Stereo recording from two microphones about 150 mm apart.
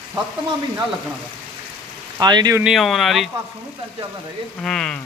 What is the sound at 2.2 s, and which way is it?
Speech, 30° right (ahead or behind).